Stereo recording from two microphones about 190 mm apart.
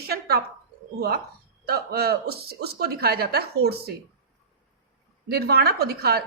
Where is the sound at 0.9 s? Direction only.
55° right (ahead or behind).